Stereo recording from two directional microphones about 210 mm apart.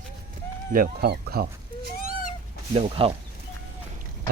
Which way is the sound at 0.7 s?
45° right (ahead or behind).